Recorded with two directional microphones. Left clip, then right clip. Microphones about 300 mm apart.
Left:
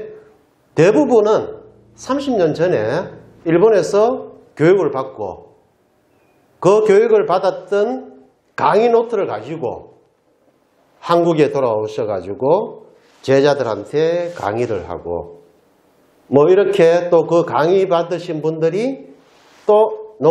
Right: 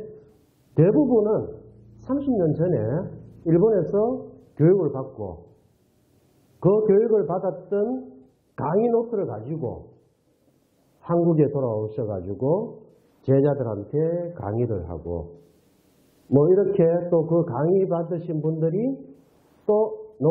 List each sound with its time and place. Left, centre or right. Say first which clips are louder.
0.7 s a man's voice: left 7 dB; centre
6.6 s a man's voice: left 8 dB; centre
11.0 s a man's voice: left 8 dB; centre
13.2 s a man's voice: left 8 dB; centre
19.4 s a sound: left 8 dB; centre
19.7 s speech: left 9 dB; left